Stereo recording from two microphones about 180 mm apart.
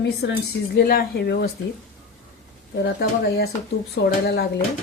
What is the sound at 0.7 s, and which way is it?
Speech, 55° left (ahead or behind).